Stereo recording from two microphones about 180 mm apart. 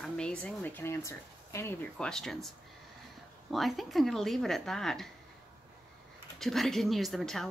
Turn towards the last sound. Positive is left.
turn(degrees=0)  # may be behind; listen again after turning